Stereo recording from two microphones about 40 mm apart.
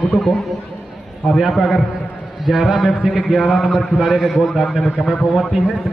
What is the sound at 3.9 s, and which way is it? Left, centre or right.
Speech, right.